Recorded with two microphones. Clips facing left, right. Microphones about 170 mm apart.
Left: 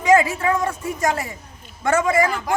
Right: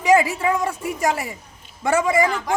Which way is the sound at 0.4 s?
10° right (ahead or behind).